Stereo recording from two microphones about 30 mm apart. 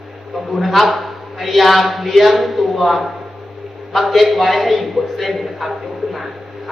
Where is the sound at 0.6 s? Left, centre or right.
Centre.